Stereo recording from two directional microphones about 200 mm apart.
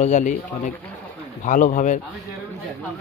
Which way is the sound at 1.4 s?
40° left (ahead or behind).